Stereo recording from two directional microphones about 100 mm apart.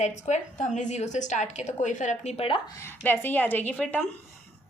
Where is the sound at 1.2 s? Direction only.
90° left; by 2.6 s 70° left (ahead or behind).